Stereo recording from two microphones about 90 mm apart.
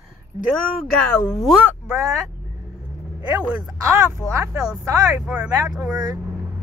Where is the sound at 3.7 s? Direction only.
35° right (ahead or behind).